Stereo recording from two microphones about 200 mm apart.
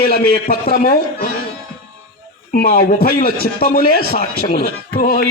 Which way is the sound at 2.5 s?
50° left (ahead or behind).